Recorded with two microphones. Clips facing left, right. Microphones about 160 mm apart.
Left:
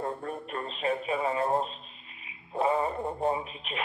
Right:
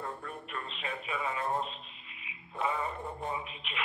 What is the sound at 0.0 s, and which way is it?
Speech, 35° left (ahead or behind).